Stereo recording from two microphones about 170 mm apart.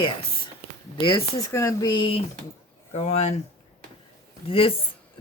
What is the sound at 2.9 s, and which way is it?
Speech, 40° left (ahead or behind).